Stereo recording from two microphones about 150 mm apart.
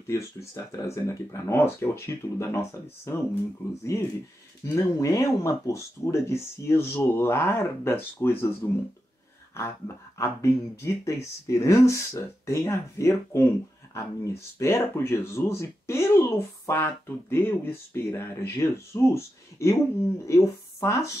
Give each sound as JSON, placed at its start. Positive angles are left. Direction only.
{"t": 0.0, "sound": "speech", "side_deg": 20}
{"t": 9.6, "sound": "speech", "side_deg": 15}